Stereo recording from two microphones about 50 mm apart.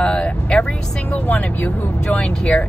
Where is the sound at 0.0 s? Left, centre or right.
Left.